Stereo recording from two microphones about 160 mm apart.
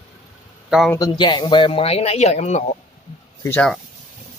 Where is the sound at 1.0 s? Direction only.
25° left (ahead or behind); by 2.7 s 45° left (ahead or behind).